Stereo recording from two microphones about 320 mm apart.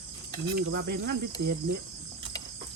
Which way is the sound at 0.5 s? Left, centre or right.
Right.